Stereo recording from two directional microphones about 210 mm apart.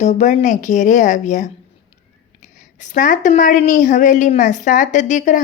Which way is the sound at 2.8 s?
35° left (ahead or behind).